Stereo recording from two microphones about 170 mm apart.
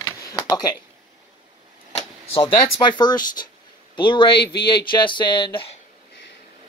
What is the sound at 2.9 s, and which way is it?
Speech, 25° left (ahead or behind).